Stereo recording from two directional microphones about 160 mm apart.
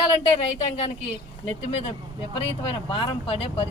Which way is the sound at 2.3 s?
35° left (ahead or behind).